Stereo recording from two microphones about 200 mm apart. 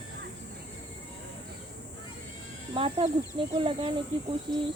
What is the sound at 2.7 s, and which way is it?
Speech, 25° right (ahead or behind).